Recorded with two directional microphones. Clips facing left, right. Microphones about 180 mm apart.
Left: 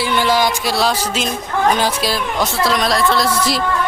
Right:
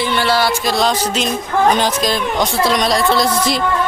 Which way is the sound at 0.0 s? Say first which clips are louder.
Even; 15° left (ahead or behind).